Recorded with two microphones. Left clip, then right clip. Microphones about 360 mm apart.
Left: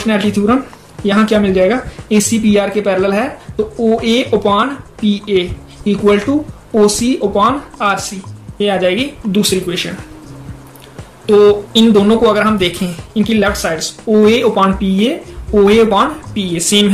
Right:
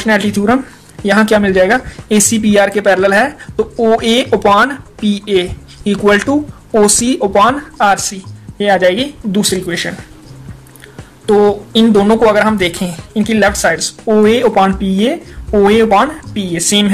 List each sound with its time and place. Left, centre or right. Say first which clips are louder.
0.0 s speech: right 2 dB; right
11.2 s speech: left 2 dB; right